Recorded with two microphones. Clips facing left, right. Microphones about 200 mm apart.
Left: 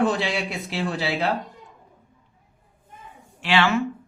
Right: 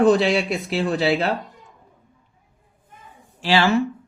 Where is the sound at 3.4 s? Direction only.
35° right (ahead or behind).